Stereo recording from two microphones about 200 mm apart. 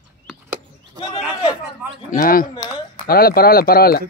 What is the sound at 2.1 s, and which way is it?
Speech, 45° left (ahead or behind).